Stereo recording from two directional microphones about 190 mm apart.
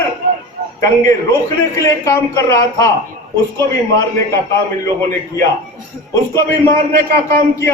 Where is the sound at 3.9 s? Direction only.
15° left (ahead or behind).